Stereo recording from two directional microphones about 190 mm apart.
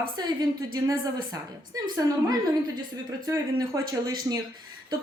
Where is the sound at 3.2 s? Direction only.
20° right (ahead or behind).